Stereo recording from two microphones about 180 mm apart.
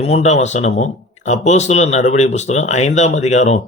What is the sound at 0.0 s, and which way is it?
Speech, 35° left (ahead or behind).